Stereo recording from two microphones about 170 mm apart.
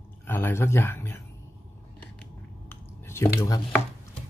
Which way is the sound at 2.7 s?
15° left (ahead or behind).